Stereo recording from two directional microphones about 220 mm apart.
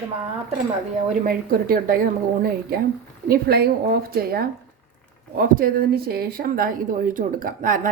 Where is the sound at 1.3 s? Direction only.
40° right (ahead or behind).